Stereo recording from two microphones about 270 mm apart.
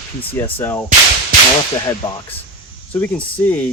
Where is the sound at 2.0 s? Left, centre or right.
Centre.